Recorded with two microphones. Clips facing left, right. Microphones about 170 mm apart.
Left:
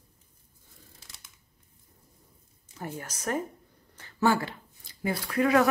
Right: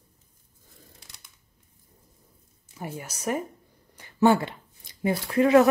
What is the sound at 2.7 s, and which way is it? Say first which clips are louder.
Speech: right 1 dB; 10° right (ahead or behind).